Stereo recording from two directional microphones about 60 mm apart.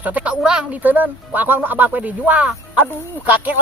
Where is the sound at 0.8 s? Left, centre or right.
Right.